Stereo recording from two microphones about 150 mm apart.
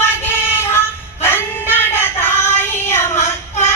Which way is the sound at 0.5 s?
15° left (ahead or behind).